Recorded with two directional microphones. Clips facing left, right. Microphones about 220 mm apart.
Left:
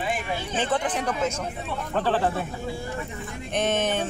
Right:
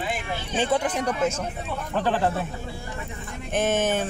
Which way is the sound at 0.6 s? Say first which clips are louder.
Right 3 dB; 10° right (ahead or behind).